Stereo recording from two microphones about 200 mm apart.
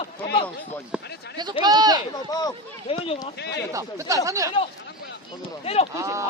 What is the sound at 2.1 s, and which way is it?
Speech, 20° left (ahead or behind).